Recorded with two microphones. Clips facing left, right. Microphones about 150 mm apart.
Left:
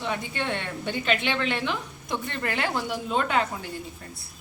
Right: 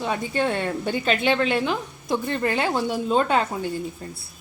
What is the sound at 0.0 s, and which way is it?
A woman's voice, 40° right (ahead or behind).